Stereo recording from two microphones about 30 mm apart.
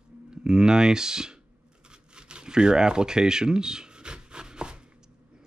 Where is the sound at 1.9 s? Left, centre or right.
Right.